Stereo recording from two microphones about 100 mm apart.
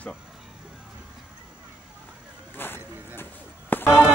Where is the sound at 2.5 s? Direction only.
20° left (ahead or behind).